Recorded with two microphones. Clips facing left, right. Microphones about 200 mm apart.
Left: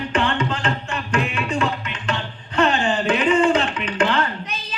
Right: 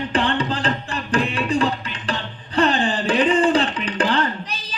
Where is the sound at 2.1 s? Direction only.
35° right (ahead or behind).